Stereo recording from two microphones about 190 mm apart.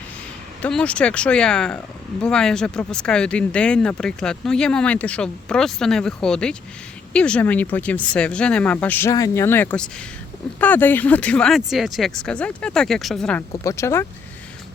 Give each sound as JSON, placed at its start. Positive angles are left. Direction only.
{"t": 0.6, "sound": "speech", "side_deg": 5}
{"t": 13.7, "sound": "speech", "side_deg": 15}